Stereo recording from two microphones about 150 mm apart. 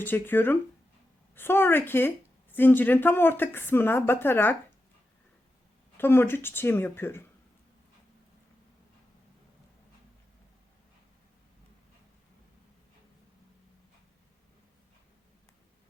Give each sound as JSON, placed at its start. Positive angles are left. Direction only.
{"t": 0.0, "sound": "speech", "side_deg": 15}
{"t": 6.0, "sound": "speech", "side_deg": 15}